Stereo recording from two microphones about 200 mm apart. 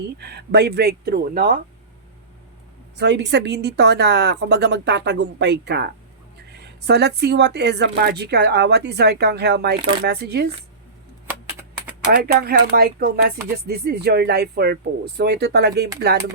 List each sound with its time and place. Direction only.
0.2 s speech: 55° right (ahead or behind)
3.0 s a woman's voice: 60° right (ahead or behind)
12.1 s speech: 50° right (ahead or behind)